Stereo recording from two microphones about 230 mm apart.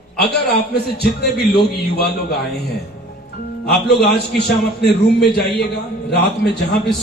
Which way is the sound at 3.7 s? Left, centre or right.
Left.